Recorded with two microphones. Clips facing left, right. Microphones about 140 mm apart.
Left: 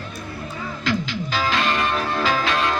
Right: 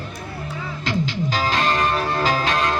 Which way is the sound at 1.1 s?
40° right (ahead or behind).